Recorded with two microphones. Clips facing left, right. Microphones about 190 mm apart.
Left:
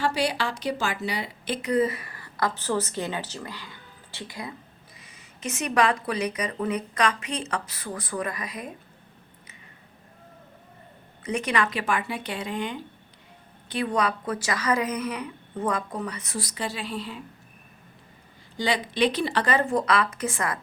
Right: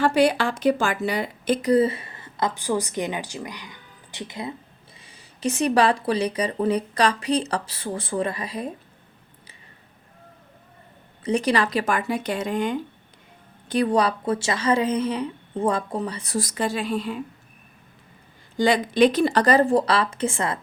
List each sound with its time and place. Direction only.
0.0 s a woman's voice: 55° right (ahead or behind); by 8.7 s 30° right (ahead or behind)
11.2 s a woman's voice: 35° right (ahead or behind)
16.4 s speech: 50° right (ahead or behind)
18.5 s speech: 50° right (ahead or behind); by 20.6 s 25° right (ahead or behind)